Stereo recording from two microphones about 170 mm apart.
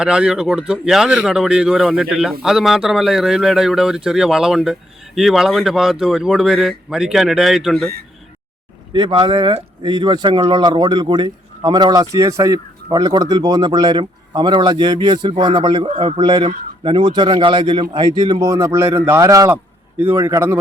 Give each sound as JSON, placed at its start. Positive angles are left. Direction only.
{"t": 0.0, "sound": "speech", "side_deg": -5}
{"t": 8.9, "sound": "a man's voice", "side_deg": -25}